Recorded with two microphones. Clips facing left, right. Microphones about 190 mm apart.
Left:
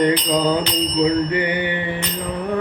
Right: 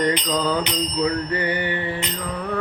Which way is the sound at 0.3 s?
15° left (ahead or behind).